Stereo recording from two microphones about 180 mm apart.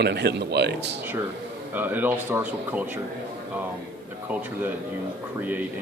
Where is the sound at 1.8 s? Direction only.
10° right (ahead or behind).